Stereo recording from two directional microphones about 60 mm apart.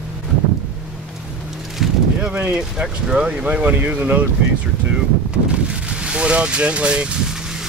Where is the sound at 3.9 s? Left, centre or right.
Right.